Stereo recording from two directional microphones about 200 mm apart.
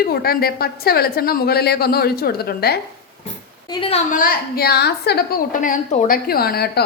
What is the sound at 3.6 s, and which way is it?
Speech, 25° left (ahead or behind).